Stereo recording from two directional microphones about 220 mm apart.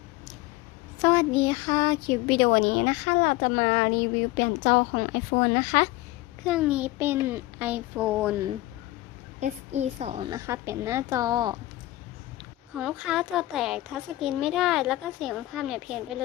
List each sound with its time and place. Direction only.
1.0 s a woman's voice: 15° left (ahead or behind); by 4.9 s 40° left (ahead or behind)
5.4 s speech: 25° left (ahead or behind)
6.4 s a woman's voice: 5° right (ahead or behind)
9.4 s a woman's voice: 30° right (ahead or behind)
12.4 s a woman's voice: 5° right (ahead or behind)